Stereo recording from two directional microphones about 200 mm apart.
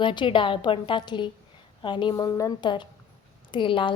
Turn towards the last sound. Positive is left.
turn(degrees=25)  # may be behind; listen again after turning